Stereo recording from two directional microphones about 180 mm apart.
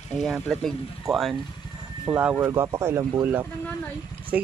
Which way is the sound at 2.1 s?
15° right (ahead or behind).